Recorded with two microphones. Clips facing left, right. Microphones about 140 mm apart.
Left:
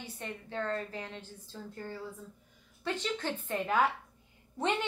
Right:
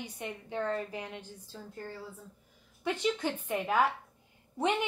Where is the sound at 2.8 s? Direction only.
10° right (ahead or behind).